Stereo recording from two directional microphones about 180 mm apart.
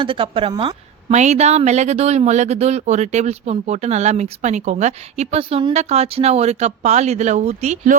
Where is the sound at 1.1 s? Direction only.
40° right (ahead or behind).